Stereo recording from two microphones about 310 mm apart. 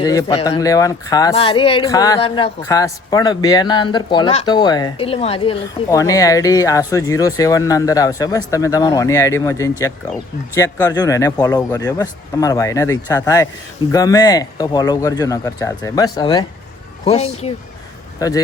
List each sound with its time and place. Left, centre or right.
0.0 s speech: centre